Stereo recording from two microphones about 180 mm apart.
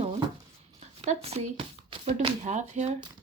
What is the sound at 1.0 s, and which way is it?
Speech, 35° right (ahead or behind).